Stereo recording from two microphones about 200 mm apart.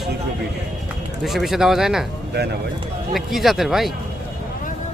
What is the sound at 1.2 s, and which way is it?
Speech, centre (ahead or behind).